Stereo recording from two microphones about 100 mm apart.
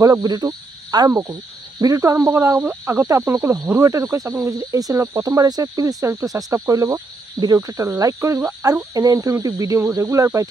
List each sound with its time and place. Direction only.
0.0 s speech: 40° right (ahead or behind)